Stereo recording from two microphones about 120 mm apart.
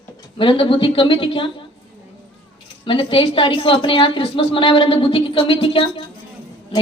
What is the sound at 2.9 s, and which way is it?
A woman's voice, 45° left (ahead or behind).